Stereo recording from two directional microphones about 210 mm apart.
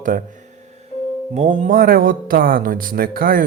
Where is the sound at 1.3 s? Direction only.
35° right (ahead or behind).